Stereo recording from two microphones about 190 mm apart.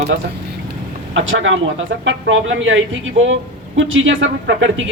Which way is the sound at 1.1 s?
85° right.